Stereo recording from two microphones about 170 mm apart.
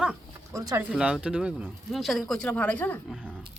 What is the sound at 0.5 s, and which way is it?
Speech, 20° right (ahead or behind).